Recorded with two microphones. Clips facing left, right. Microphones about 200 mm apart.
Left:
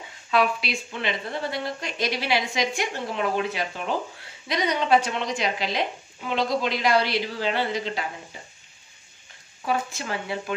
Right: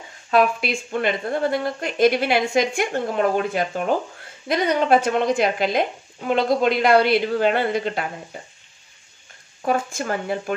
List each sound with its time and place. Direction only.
0.3 s speech: 50° right (ahead or behind)
9.7 s speech: 50° right (ahead or behind)